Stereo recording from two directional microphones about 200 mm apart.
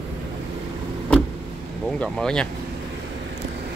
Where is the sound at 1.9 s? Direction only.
5° left (ahead or behind).